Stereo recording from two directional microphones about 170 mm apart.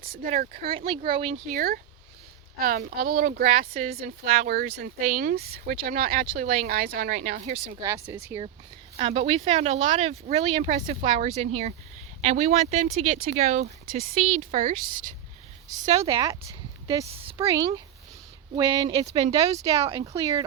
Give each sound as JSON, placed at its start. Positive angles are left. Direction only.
{"t": 0.0, "sound": "speech", "side_deg": -60}
{"t": 0.7, "sound": "speech", "side_deg": -30}
{"t": 1.5, "sound": "speech", "side_deg": -60}
{"t": 7.8, "sound": "speech", "side_deg": -15}
{"t": 9.0, "sound": "speech", "side_deg": -35}